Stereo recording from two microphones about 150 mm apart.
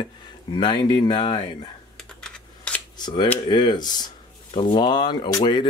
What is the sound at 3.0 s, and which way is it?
Speech, 30° left (ahead or behind).